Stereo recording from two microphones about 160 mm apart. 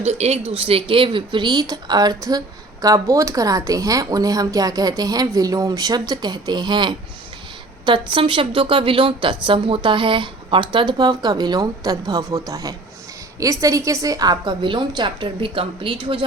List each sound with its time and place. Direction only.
0.0 s a woman's voice: 40° right (ahead or behind)